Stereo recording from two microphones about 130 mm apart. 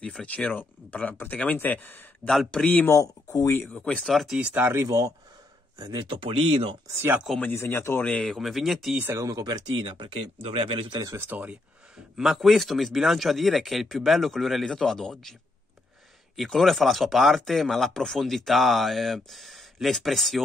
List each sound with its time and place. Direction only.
0.0 s speech: 5° left (ahead or behind)
2.9 s speech: 25° left (ahead or behind); by 6.8 s 45° right (ahead or behind)
6.9 s speech: 20° right (ahead or behind)
7.2 s speech: 5° left (ahead or behind)
7.5 s speech: 20° left (ahead or behind)
8.1 s speech: centre (ahead or behind)
8.9 s speech: 15° right (ahead or behind)
9.2 s speech: 30° right (ahead or behind)
11.1 s speech: 15° right (ahead or behind)
12.2 s speech: centre (ahead or behind)
16.3 s speech: centre (ahead or behind)